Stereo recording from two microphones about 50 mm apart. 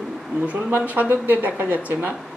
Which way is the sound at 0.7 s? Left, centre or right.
Right.